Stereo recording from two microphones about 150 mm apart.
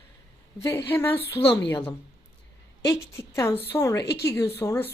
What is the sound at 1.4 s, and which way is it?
Speech, 35° left (ahead or behind).